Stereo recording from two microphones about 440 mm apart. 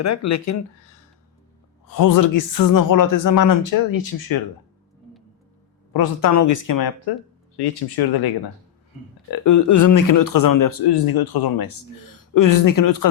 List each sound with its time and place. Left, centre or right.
0.0 s speech: left
1.9 s speech: left
5.9 s speech: left
6.3 s speech: left
9.4 s speech: left